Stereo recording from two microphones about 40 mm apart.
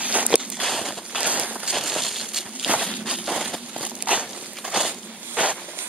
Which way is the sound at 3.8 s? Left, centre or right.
Right.